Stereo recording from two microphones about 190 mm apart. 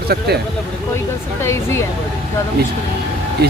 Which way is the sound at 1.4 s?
15° left (ahead or behind).